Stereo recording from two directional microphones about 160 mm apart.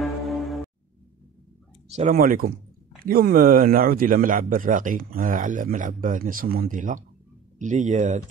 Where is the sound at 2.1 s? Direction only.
65° right (ahead or behind).